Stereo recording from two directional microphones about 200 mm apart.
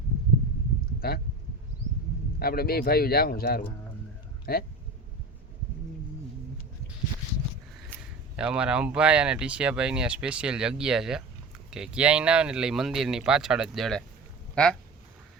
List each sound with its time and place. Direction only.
0.9 s speech: 50° left (ahead or behind)
2.4 s speech: 50° left (ahead or behind)
8.4 s speech: 5° right (ahead or behind)